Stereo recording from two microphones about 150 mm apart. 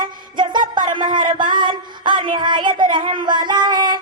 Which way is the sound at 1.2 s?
65° right (ahead or behind).